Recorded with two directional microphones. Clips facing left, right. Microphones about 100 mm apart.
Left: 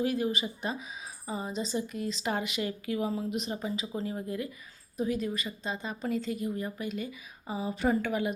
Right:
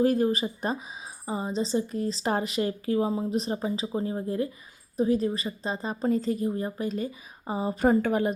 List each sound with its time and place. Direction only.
0.0 s speech: 40° right (ahead or behind)